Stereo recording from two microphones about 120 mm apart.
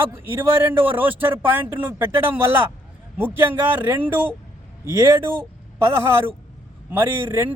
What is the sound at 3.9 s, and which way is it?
A man's voice, 15° right (ahead or behind).